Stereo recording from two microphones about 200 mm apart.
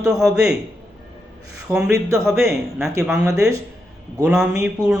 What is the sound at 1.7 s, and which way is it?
Speech, 15° right (ahead or behind).